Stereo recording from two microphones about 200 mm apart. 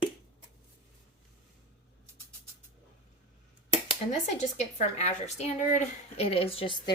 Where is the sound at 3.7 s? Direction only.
30° left (ahead or behind).